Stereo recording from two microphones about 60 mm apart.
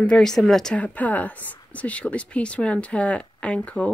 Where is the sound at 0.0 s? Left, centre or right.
Centre.